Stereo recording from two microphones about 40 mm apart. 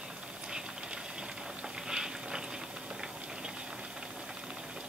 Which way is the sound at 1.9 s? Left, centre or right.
Centre.